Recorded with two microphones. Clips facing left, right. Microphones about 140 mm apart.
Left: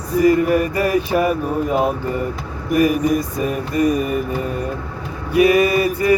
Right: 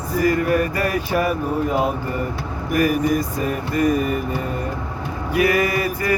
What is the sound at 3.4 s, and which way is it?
Mantra, 20° left (ahead or behind).